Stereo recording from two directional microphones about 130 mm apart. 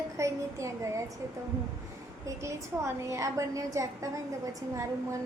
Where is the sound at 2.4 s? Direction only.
20° right (ahead or behind).